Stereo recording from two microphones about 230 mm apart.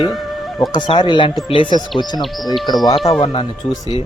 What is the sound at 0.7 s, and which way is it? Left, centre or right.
Speech, centre.